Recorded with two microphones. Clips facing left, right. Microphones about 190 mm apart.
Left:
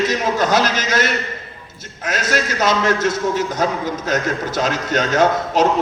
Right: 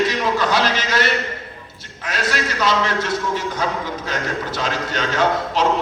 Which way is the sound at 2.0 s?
45° left (ahead or behind).